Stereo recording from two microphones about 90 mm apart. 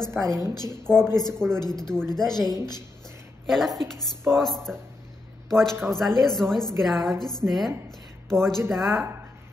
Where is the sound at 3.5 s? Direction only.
Centre (ahead or behind).